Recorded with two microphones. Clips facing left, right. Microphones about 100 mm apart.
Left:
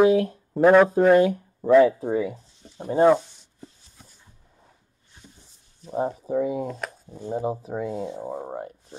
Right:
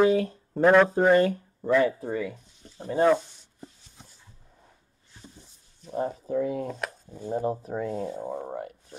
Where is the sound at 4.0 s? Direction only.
20° right (ahead or behind).